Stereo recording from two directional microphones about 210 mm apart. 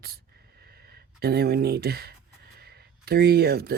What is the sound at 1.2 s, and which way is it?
Speech, 50° right (ahead or behind).